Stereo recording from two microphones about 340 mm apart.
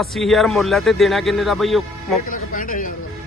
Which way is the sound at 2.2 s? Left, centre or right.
Left.